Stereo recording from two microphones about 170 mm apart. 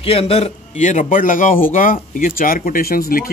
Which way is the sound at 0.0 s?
35° left (ahead or behind).